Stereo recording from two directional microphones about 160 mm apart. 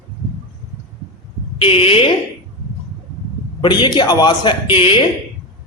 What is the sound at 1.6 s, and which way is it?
Speech, 35° left (ahead or behind).